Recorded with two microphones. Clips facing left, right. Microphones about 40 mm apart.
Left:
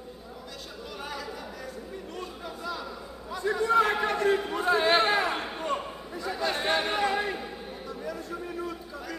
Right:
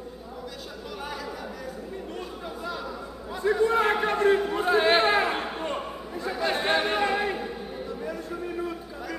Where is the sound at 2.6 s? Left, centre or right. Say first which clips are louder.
Right 1 dB; centre.